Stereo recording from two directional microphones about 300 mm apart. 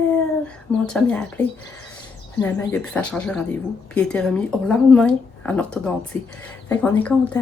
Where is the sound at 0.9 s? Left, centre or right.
Centre.